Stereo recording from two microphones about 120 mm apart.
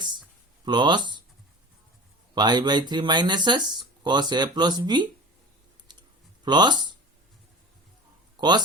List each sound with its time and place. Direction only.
0.6 s speech: 40° right (ahead or behind)
2.3 s speech: 40° right (ahead or behind)
5.9 s a sound: 40° right (ahead or behind)
8.4 s speech: 35° right (ahead or behind)